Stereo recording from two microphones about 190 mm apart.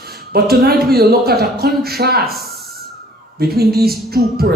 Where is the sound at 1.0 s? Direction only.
55° right (ahead or behind).